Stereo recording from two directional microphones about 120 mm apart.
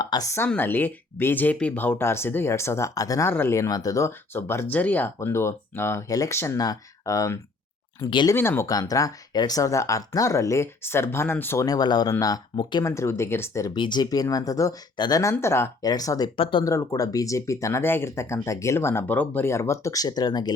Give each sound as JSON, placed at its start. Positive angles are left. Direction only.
{"t": 0.0, "sound": "speech", "side_deg": 30}
{"t": 0.4, "sound": "speech", "side_deg": 15}
{"t": 11.6, "sound": "speech", "side_deg": 35}
{"t": 12.8, "sound": "speech", "side_deg": 25}
{"t": 13.7, "sound": "speech", "side_deg": 40}
{"t": 15.8, "sound": "speech", "side_deg": 30}
{"t": 16.4, "sound": "speech", "side_deg": 45}
{"t": 16.6, "sound": "speech", "side_deg": 25}